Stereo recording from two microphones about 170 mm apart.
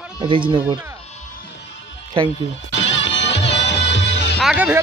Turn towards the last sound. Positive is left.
turn(degrees=-5)  # may be behind; listen again after turning